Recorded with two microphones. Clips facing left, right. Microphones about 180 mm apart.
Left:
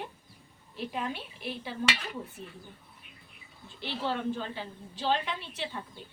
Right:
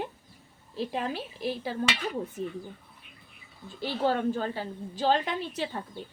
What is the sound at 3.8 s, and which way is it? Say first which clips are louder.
A woman's voice: right 6 dB; 45° right (ahead or behind).